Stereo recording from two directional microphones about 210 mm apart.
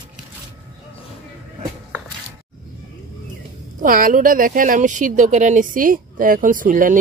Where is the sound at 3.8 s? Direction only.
40° right (ahead or behind).